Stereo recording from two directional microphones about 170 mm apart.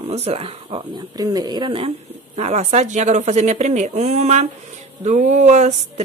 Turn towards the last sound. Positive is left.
turn(degrees=-40)  # may be behind; listen again after turning